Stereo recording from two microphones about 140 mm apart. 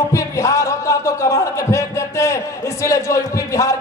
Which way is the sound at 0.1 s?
20° left (ahead or behind).